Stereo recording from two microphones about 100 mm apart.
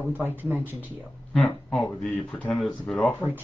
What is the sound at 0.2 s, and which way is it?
Speech, 20° right (ahead or behind).